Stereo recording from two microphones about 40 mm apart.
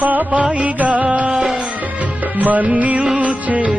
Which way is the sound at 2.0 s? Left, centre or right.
Right.